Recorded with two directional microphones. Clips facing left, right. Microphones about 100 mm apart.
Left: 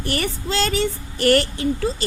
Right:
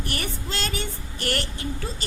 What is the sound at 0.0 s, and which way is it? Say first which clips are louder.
Speech: left 7 dB; 90° left.